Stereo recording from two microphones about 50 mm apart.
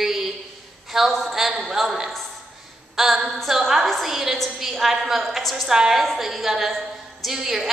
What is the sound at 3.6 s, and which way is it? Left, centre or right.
A woman's voice, centre.